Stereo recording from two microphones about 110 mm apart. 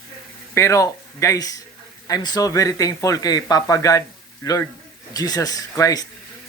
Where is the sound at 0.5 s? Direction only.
30° left (ahead or behind).